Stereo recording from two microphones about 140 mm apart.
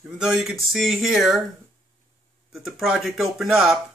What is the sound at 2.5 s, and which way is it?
Speech, centre (ahead or behind).